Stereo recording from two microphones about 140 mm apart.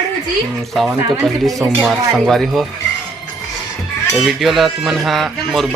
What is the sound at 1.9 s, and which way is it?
Speech, centre (ahead or behind).